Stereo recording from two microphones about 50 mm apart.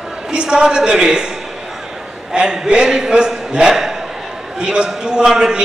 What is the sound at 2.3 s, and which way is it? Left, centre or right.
A man's voice, centre.